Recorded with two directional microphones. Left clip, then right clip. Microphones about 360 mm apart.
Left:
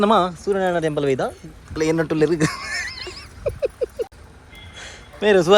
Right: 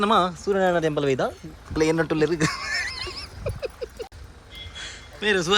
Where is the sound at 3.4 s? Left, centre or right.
Centre.